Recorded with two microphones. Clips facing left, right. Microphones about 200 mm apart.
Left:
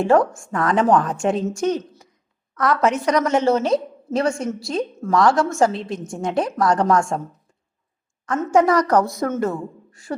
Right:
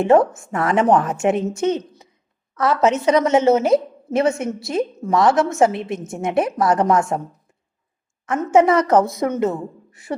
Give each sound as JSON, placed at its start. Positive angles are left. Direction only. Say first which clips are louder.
{"t": 0.3, "sound": "a woman's voice", "louder": "right 1 dB", "side_deg": -20}
{"t": 8.4, "sound": "a woman's voice", "louder": "right 2 dB", "side_deg": -20}